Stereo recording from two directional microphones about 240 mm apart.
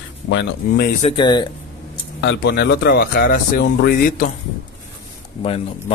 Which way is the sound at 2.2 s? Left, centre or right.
Left.